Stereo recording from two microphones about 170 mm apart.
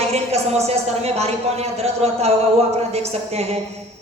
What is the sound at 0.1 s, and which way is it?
Speech, 40° right (ahead or behind).